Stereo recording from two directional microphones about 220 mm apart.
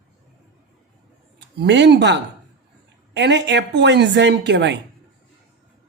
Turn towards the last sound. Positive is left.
turn(degrees=-50)  # may be behind; listen again after turning